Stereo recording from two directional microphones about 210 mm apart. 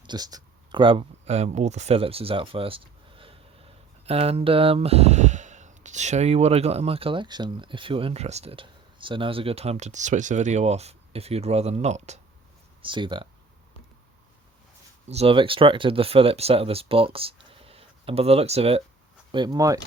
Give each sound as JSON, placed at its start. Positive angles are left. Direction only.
{"t": 0.0, "sound": "speech", "side_deg": -20}
{"t": 15.0, "sound": "speech", "side_deg": -30}
{"t": 17.5, "sound": "a sound", "side_deg": -25}
{"t": 19.3, "sound": "speech", "side_deg": -20}